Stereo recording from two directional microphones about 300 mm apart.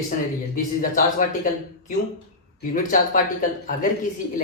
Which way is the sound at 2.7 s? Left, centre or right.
Left.